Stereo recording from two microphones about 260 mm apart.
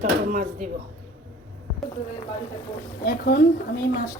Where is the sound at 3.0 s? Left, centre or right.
Left.